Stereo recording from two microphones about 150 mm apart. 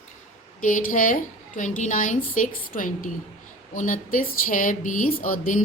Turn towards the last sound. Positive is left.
turn(degrees=65)  # may be behind; listen again after turning